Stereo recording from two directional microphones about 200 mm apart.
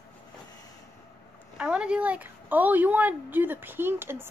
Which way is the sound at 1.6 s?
5° right (ahead or behind).